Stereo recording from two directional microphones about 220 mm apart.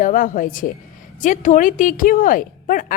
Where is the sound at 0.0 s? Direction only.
35° left (ahead or behind).